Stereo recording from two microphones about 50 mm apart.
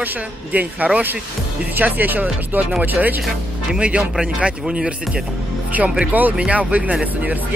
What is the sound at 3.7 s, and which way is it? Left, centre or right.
Speech, right.